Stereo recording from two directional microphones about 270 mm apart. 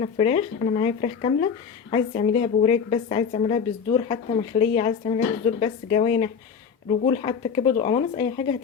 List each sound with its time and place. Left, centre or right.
0.0 s a woman's voice: left